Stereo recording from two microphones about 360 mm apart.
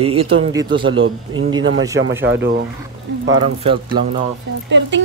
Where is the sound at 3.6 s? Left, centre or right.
Centre.